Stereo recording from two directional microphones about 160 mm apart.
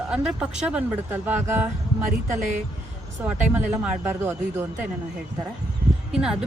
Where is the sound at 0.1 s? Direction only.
5° right (ahead or behind).